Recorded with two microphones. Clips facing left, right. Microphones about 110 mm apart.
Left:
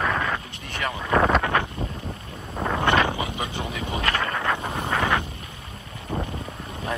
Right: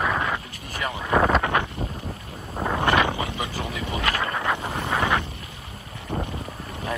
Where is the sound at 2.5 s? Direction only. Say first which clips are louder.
Even; 5° right (ahead or behind).